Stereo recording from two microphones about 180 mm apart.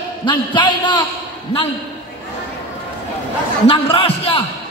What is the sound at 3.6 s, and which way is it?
Speech, 30° left (ahead or behind).